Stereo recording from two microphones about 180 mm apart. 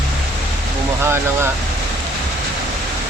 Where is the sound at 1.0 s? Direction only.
15° right (ahead or behind).